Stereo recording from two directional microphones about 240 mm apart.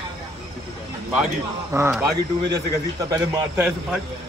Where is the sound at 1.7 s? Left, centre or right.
Centre.